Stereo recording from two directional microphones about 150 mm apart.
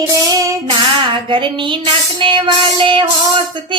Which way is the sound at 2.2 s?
35° right (ahead or behind).